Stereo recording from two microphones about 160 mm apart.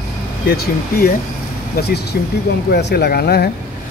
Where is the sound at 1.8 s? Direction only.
90° left.